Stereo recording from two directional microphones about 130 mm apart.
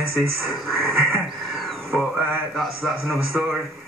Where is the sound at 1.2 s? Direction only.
Centre (ahead or behind).